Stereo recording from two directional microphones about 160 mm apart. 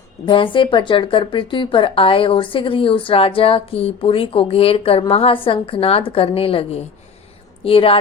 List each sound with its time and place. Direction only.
0.3 s speech: 30° left (ahead or behind)